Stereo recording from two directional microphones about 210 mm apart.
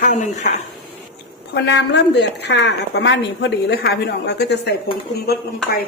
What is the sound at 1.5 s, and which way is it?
A woman's voice, 55° left (ahead or behind).